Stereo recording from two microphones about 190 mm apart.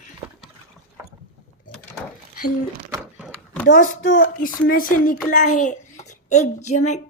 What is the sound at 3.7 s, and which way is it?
A child's voice, 40° left (ahead or behind).